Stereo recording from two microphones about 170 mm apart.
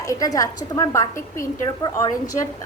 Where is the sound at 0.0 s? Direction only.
20° left (ahead or behind).